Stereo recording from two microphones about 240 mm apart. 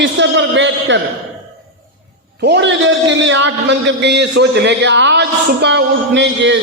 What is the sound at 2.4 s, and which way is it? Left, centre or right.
A man's voice, right.